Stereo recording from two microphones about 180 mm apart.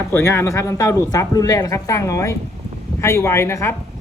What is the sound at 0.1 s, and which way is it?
Speech, 15° left (ahead or behind).